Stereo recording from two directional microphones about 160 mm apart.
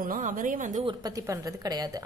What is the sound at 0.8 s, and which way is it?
A woman's voice, 25° right (ahead or behind).